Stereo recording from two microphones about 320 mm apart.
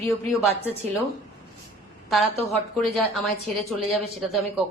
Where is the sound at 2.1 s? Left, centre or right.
Centre.